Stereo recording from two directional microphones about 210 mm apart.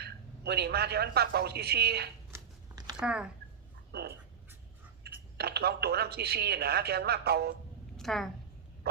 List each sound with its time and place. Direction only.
0.0 s a man's voice: 50° right (ahead or behind)
2.3 s biting: 20° right (ahead or behind)
3.0 s speech: 5° right (ahead or behind)
3.9 s speech: 50° right (ahead or behind)
7.9 s a woman's voice: centre (ahead or behind)